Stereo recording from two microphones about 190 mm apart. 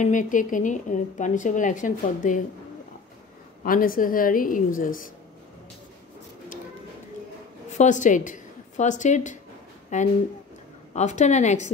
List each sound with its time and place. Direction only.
0.0 s a woman's voice: 45° left (ahead or behind)
3.6 s a woman's voice: 50° left (ahead or behind)
7.7 s a woman's voice: 40° left (ahead or behind)